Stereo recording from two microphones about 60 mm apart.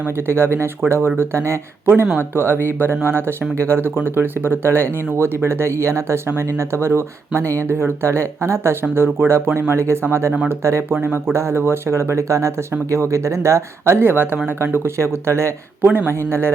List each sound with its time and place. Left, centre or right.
0.3 s speech: right
10.8 s speech: right